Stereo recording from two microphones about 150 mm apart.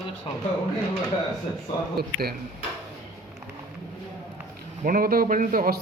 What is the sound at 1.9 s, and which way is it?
Speech, 90° right.